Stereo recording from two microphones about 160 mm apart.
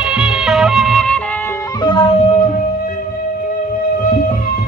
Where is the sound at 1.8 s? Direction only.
35° left (ahead or behind).